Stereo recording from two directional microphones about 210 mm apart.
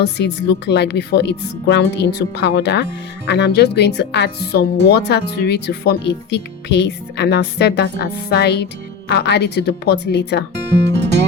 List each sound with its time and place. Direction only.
0.0 s speech: 55° left (ahead or behind)